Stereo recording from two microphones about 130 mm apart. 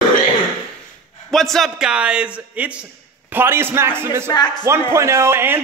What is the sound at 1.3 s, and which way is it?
A man's voice, centre (ahead or behind).